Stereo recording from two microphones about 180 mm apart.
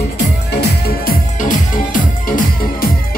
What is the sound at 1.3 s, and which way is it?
Music, 45° left (ahead or behind).